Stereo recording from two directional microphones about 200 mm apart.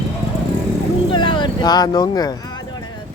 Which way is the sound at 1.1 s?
25° left (ahead or behind).